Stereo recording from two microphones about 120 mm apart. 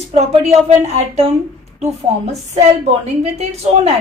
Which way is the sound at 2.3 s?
65° right (ahead or behind).